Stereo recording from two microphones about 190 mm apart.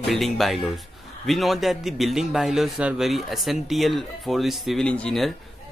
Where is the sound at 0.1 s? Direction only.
Centre (ahead or behind).